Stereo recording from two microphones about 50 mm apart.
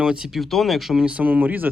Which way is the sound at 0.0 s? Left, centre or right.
Centre.